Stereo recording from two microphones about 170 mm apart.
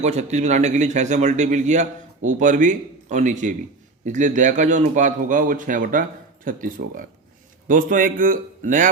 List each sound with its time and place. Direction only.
0.0 s a man's voice: 40° right (ahead or behind)